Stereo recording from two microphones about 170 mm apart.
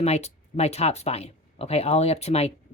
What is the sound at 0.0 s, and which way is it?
Speech, 40° left (ahead or behind).